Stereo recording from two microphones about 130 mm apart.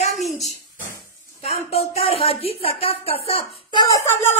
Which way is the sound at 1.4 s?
55° left (ahead or behind).